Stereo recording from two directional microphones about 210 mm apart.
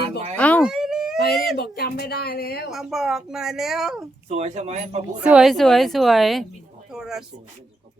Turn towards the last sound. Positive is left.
turn(degrees=0)  # may be behind; listen again after turning